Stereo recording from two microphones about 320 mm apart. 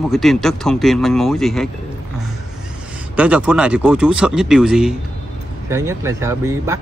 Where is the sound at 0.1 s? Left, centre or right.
Centre.